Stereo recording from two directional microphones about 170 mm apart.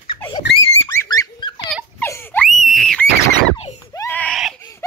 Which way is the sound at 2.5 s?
Centre (ahead or behind).